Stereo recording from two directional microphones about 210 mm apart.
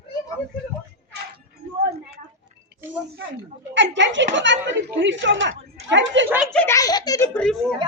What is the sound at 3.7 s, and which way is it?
Speech, 60° right (ahead or behind).